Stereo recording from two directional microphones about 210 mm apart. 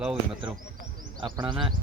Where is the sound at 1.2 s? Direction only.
20° right (ahead or behind).